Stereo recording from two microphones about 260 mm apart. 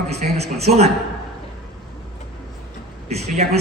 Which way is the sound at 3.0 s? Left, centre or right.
Right.